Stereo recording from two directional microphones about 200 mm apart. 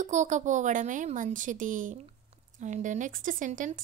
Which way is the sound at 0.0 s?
35° right (ahead or behind).